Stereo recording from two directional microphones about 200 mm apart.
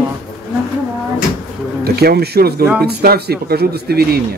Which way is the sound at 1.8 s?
50° right (ahead or behind).